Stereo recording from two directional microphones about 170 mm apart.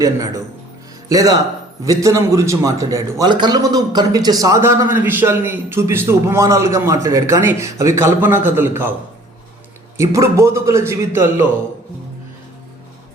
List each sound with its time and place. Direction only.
0.0 s a man's voice: 20° right (ahead or behind)
10.0 s a man's voice: 15° right (ahead or behind)